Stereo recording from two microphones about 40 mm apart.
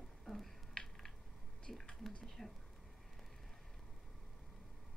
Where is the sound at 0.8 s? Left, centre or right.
Left.